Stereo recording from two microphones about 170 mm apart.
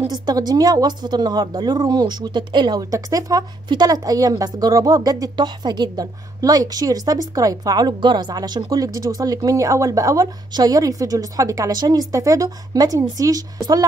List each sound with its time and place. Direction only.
0.1 s a woman's voice: 25° right (ahead or behind)